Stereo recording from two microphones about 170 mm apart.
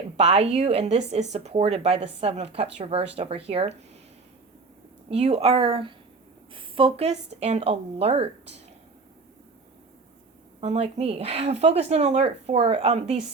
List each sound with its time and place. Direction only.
0.2 s speech: 35° right (ahead or behind)
5.1 s a woman's voice: 40° right (ahead or behind)
10.6 s speech: 40° right (ahead or behind)